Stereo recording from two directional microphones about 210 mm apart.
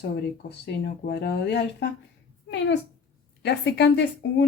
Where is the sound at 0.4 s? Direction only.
50° left (ahead or behind).